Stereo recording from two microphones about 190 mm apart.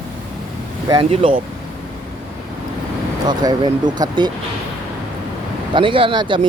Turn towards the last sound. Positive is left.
turn(degrees=-25)  # may be behind; listen again after turning